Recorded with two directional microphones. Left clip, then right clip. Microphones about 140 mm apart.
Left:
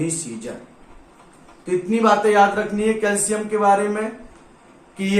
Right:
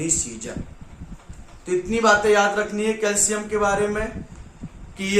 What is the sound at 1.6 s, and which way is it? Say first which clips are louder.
A man's voice: left 1 dB; 30° right (ahead or behind).